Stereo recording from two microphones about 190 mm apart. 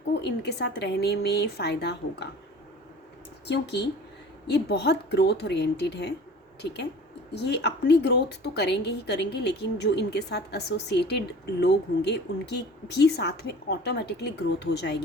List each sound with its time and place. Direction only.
0.1 s a woman's voice: 65° left (ahead or behind)
3.4 s a woman's voice: 65° left (ahead or behind)
7.3 s a woman's voice: 65° left (ahead or behind)